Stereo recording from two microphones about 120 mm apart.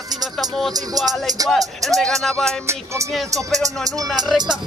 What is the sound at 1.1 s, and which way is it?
Speech, 30° right (ahead or behind).